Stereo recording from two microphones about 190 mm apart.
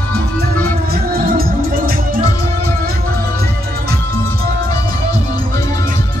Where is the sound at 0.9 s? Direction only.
50° right (ahead or behind).